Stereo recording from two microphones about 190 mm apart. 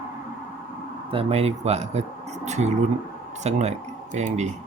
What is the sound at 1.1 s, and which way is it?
Speech, 30° right (ahead or behind).